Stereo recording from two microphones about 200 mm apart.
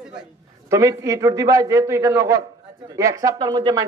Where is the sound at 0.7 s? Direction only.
15° right (ahead or behind).